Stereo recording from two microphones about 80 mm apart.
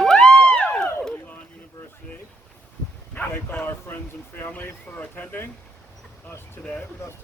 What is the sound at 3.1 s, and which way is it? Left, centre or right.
Speech, left.